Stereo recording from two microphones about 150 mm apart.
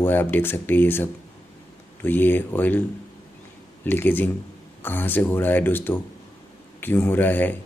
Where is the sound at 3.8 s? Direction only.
15° left (ahead or behind).